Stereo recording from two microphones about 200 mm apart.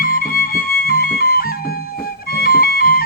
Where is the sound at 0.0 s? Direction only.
45° left (ahead or behind).